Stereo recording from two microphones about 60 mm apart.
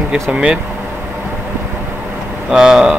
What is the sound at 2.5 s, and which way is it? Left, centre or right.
Speech, centre.